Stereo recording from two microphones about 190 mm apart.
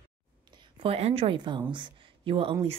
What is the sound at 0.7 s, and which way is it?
A woman's voice, 30° right (ahead or behind).